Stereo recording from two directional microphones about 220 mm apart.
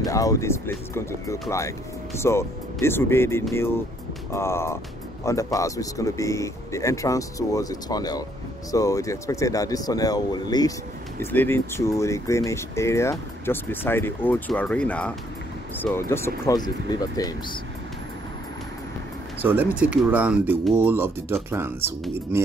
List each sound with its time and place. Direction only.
0.1 s speech: 15° left (ahead or behind)
2.1 s speech: 10° left (ahead or behind)
19.4 s speech: 10° right (ahead or behind)